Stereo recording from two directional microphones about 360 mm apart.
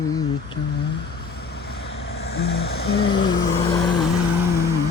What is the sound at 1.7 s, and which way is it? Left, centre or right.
Vehicle, left.